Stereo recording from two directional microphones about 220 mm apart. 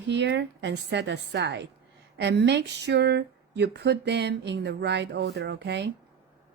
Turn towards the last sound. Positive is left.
turn(degrees=-50)  # may be behind; listen again after turning